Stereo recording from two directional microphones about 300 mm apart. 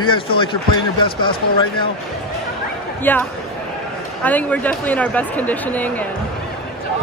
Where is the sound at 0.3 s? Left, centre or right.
Centre.